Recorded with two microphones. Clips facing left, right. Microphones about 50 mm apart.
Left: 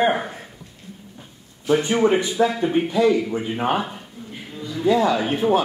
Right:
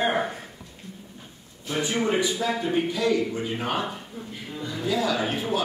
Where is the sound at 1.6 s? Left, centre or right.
Left.